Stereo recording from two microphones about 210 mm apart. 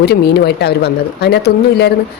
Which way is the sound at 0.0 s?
50° left (ahead or behind).